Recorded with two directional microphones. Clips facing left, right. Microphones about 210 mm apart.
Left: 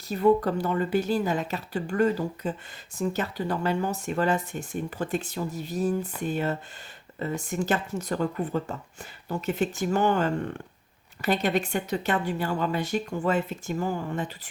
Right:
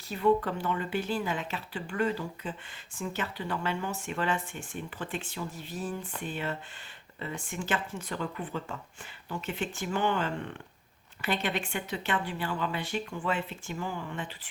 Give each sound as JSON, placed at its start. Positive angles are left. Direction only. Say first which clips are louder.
{"t": 0.1, "sound": "speech", "louder": "left 5 dB", "side_deg": 40}